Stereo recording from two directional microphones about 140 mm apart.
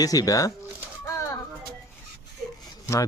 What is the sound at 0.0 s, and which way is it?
Speech, 25° left (ahead or behind).